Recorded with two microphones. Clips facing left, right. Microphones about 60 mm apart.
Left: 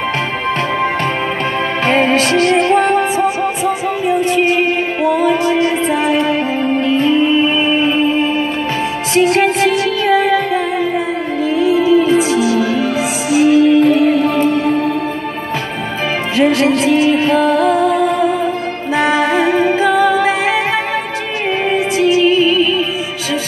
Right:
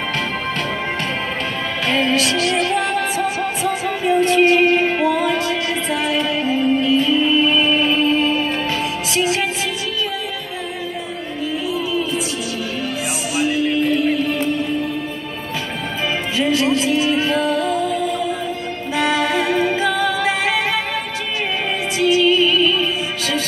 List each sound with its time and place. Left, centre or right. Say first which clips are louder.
1.9 s music: left 5 dB; left
2.5 s music: left 7 dB; left
3.0 s music: left 6 dB; left
9.1 s music: left 9 dB; left
10.0 s music: left 14 dB; left
11.4 s music: left 10 dB; left
13.3 s music: left 10 dB; left
16.3 s music: left 6 dB; left
18.9 s music: left 5 dB; left